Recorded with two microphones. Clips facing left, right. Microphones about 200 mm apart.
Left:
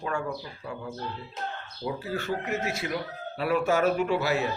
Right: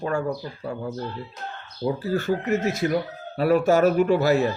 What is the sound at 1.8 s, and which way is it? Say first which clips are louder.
Speech: right 7 dB; 40° right (ahead or behind).